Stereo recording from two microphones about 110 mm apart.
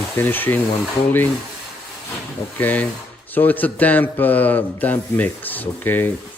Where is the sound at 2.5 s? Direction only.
15° left (ahead or behind).